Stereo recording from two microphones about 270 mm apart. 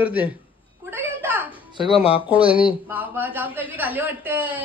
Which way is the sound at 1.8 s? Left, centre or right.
Left.